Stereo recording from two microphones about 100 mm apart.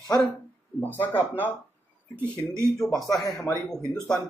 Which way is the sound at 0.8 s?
15° left (ahead or behind).